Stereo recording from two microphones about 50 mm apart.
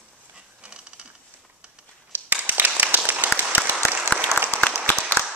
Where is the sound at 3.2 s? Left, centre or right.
Right.